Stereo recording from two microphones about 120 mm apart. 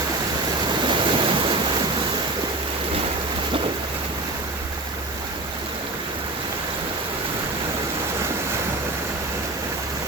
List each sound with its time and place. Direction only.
0.9 s waves: 45° right (ahead or behind)